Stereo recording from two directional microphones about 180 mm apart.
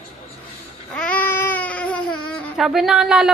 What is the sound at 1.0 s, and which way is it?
Baby cry, 10° left (ahead or behind).